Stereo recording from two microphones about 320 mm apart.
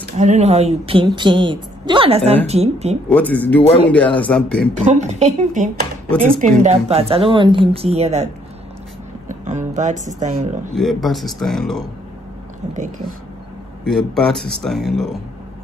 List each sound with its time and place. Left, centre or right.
0.0 s a woman's voice: right
3.1 s speech: centre
4.7 s speech: right
6.0 s speech: centre
6.6 s speech: centre
9.3 s speech: right
10.7 s speech: centre
13.8 s speech: centre